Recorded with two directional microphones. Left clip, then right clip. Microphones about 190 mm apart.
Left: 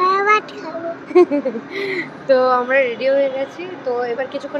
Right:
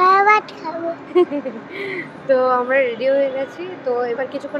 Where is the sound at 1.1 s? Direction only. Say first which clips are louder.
Left 4 dB; 35° left (ahead or behind).